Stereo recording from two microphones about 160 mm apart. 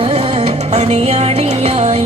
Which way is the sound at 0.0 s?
40° right (ahead or behind).